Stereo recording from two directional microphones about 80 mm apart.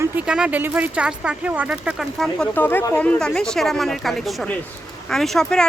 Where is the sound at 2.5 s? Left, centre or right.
Left; by 5.7 s centre.